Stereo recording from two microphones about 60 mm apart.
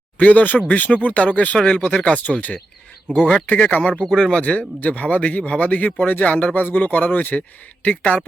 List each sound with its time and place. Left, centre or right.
0.2 s a man's voice: left
1.5 s a man's voice: centre